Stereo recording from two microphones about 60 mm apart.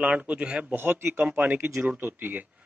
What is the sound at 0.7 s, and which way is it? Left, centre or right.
Speech, right.